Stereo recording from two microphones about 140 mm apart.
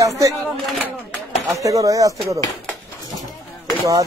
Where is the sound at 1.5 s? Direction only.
25° right (ahead or behind).